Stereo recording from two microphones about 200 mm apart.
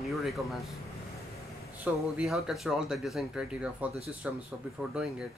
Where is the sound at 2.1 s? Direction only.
Centre (ahead or behind).